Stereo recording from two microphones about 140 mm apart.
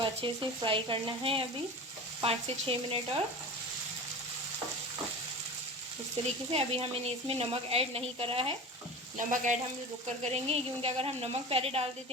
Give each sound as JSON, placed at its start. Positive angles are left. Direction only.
{"t": 0.0, "sound": "speech", "side_deg": -35}
{"t": 6.5, "sound": "speech", "side_deg": -45}
{"t": 9.1, "sound": "speech", "side_deg": -60}
{"t": 10.2, "sound": "speech", "side_deg": -50}